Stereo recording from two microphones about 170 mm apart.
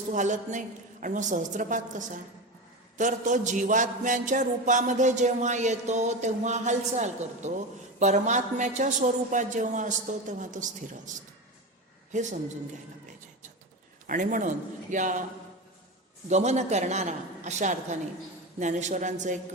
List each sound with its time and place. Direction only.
0.1 s a man's voice: 45° right (ahead or behind)
12.1 s a man's voice: 45° right (ahead or behind)
14.1 s a man's voice: 50° right (ahead or behind)
16.3 s a man's voice: 40° right (ahead or behind)